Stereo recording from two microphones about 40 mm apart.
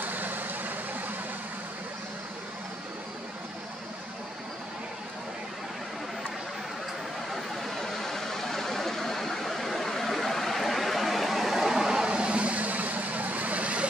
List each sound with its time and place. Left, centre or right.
0.0 s vehicle: right
7.3 s a sound: centre
12.1 s vehicle: right